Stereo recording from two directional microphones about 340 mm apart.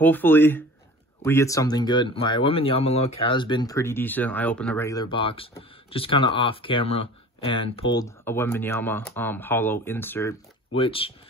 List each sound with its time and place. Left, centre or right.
0.0 s speech: centre